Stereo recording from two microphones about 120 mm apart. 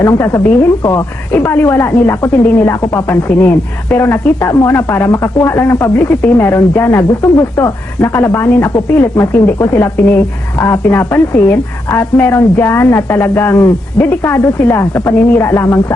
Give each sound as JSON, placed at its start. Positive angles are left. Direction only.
{"t": 0.0, "sound": "speech", "side_deg": 25}
{"t": 1.3, "sound": "speech", "side_deg": 15}